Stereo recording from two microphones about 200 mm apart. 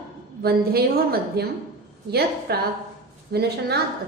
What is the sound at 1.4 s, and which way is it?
A woman's voice, 50° right (ahead or behind).